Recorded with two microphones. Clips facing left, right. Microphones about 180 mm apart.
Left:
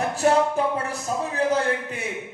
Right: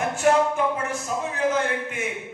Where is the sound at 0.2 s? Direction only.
35° left (ahead or behind).